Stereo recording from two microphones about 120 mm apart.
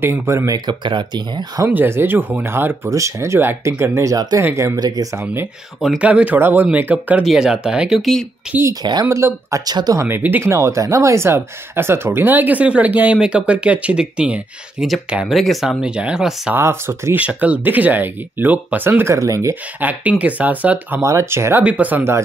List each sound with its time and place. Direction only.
0.0 s speech: 20° right (ahead or behind)
0.7 s speech: 40° right (ahead or behind)
1.7 s speech: 20° right (ahead or behind)
4.7 s speech: 35° right (ahead or behind)
5.1 s speech: 20° right (ahead or behind)
5.8 s speech: 5° right (ahead or behind)
9.1 s speech: 25° right (ahead or behind)
10.0 s speech: 15° right (ahead or behind)
16.5 s speech: 20° right (ahead or behind)
19.8 s speech: 15° right (ahead or behind)